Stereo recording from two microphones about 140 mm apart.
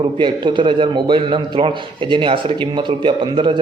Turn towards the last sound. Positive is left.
turn(degrees=-35)  # may be behind; listen again after turning